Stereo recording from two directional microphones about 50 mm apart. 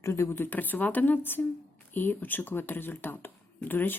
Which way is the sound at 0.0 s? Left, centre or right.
Left.